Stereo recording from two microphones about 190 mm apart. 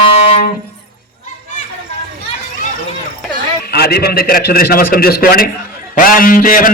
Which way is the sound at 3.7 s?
55° left (ahead or behind).